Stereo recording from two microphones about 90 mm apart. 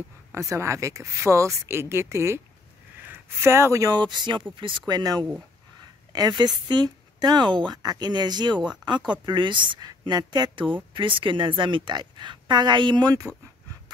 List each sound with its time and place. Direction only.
0.3 s speech: 30° right (ahead or behind)
4.0 s a woman's voice: 55° right (ahead or behind)